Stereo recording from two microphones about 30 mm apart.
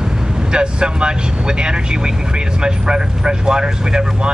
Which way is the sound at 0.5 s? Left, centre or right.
Right.